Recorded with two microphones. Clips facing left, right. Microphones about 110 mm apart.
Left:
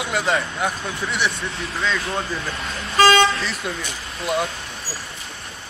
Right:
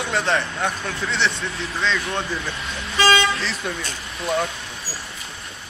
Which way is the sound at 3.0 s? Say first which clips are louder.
Left 4 dB; 40° left (ahead or behind).